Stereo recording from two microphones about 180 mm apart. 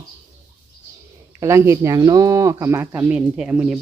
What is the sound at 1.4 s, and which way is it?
Speech, 15° right (ahead or behind).